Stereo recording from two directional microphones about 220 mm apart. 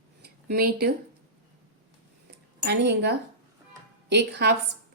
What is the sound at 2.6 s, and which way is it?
A woman's voice, 50° right (ahead or behind).